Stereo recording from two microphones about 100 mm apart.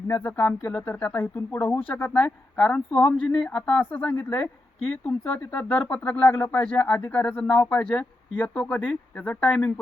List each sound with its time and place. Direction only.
0.1 s speech: 20° left (ahead or behind)